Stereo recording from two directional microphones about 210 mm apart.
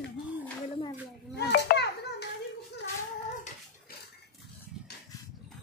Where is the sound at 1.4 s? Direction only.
50° left (ahead or behind).